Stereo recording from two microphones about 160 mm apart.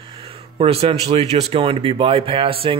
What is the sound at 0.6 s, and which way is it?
Speech, 35° right (ahead or behind).